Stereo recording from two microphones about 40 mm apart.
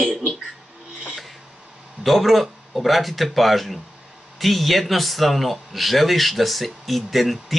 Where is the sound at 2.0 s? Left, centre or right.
Centre.